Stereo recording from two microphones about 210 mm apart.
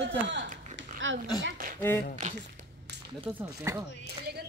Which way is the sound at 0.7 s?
65° right (ahead or behind).